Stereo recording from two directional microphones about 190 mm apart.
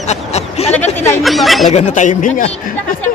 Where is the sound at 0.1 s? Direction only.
35° left (ahead or behind).